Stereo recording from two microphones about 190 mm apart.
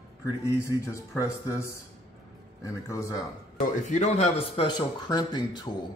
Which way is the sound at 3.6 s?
40° left (ahead or behind).